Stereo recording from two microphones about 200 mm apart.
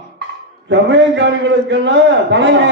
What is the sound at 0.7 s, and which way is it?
A man's voice, 65° right (ahead or behind).